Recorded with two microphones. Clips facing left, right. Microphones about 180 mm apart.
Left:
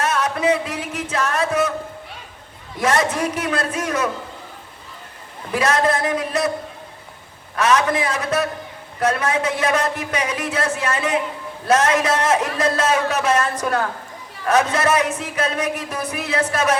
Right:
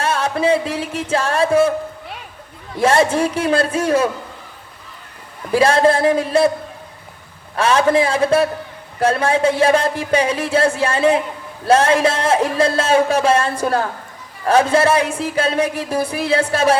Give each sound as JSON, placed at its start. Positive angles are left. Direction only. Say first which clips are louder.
{"t": 0.0, "sound": "music", "louder": "right 2 dB", "side_deg": -30}
{"t": 2.7, "sound": "speech", "louder": "right 5 dB", "side_deg": -30}
{"t": 5.5, "sound": "speech", "louder": "right 5 dB", "side_deg": -30}
{"t": 7.5, "sound": "speech", "louder": "right 4 dB", "side_deg": -30}